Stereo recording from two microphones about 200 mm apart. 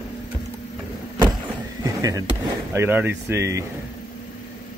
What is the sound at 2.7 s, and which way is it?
Speech, 10° right (ahead or behind).